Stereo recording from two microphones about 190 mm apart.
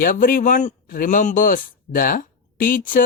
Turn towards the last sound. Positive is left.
turn(degrees=45)  # may be behind; listen again after turning